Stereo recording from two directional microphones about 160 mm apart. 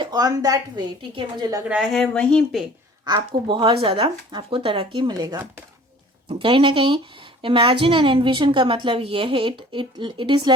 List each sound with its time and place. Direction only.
0.0 s a woman's voice: 25° right (ahead or behind)
1.6 s speech: 5° right (ahead or behind)
3.1 s a woman's voice: 25° right (ahead or behind)